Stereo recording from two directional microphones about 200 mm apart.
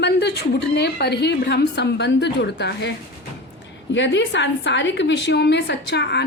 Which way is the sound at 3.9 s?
60° left (ahead or behind).